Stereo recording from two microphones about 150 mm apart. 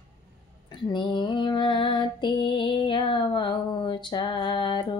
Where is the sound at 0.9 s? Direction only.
30° left (ahead or behind).